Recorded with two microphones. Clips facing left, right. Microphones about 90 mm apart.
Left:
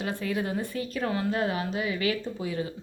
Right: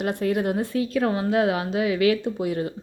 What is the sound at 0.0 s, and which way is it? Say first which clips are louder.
Speech: right 6 dB; 60° right (ahead or behind).